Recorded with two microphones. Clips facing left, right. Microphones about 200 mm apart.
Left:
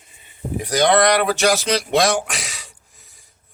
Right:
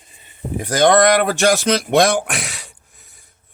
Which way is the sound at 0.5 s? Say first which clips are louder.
Right 3 dB; 50° right (ahead or behind).